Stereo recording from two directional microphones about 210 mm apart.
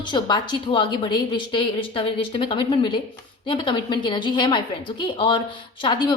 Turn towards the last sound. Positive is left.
turn(degrees=20)  # may be behind; listen again after turning